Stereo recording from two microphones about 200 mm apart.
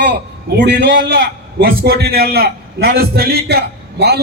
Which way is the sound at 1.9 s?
50° right (ahead or behind).